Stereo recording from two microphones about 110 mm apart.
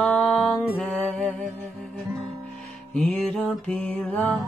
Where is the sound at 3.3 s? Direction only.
15° left (ahead or behind).